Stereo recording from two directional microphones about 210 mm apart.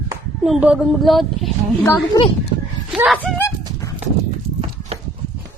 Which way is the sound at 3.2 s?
10° left (ahead or behind).